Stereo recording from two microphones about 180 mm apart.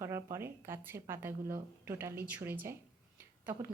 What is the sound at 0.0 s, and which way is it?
A woman's voice, 15° right (ahead or behind).